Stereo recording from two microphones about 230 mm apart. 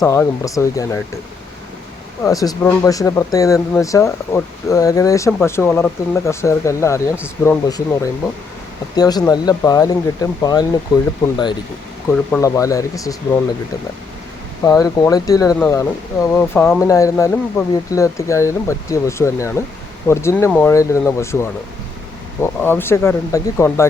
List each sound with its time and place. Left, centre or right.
0.0 s speech: centre
2.2 s speech: centre
12.3 s speech: centre
14.6 s speech: centre